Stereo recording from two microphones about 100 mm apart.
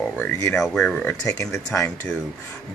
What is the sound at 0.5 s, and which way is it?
Speech, 5° left (ahead or behind).